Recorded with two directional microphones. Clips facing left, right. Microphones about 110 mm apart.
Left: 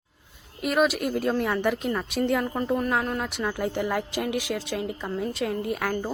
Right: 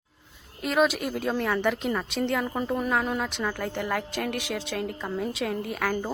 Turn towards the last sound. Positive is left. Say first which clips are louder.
# left 1 dB
turn(degrees=0)  # may be behind; listen again after turning